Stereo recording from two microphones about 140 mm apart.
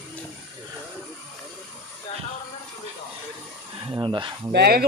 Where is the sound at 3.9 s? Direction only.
35° right (ahead or behind).